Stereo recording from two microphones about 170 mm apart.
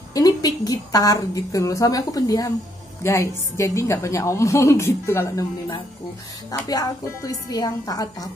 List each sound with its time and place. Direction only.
0.1 s a woman's voice: 20° left (ahead or behind)